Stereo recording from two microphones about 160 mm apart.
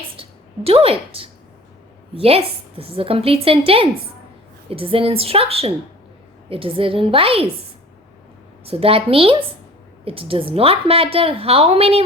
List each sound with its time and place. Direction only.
0.2 s a sound: 35° right (ahead or behind)
2.1 s a woman's voice: 35° right (ahead or behind)
8.6 s a woman's voice: 35° right (ahead or behind)